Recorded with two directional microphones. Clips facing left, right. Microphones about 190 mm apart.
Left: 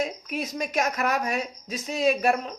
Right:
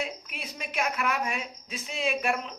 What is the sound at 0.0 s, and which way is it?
A woman's voice, 40° left (ahead or behind).